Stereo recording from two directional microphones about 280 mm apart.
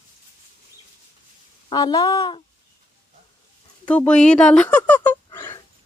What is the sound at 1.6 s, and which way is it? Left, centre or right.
Speech, centre.